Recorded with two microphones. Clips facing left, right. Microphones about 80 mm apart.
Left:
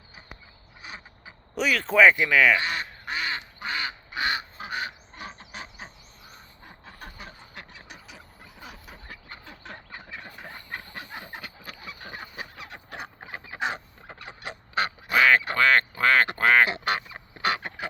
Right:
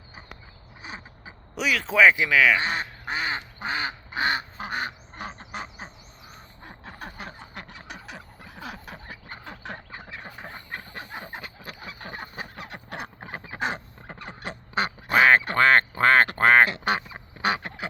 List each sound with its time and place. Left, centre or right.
0.8 s mechanisms: right
1.5 s speech: centre
2.6 s quack: right
6.7 s a sound: right
7.9 s fowl: right
8.6 s a sound: right
9.4 s duck: right
10.4 s fowl: right
12.7 s goose: right
13.3 s a sound: right
13.6 s fowl: right
14.8 s quack: right
16.8 s duck: right